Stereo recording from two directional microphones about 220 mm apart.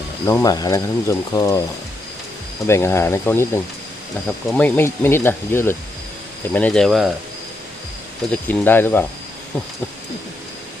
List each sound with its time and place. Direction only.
0.3 s speech: 15° left (ahead or behind)
2.6 s speech: 10° left (ahead or behind)
8.4 s speech: 10° left (ahead or behind)